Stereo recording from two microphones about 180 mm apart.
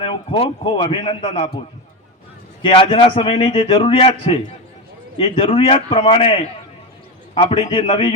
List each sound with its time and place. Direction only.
0.0 s a man's voice: 30° left (ahead or behind)
2.6 s a man's voice: 30° left (ahead or behind)